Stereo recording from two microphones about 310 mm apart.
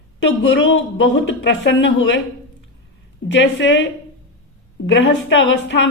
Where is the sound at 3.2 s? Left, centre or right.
Left.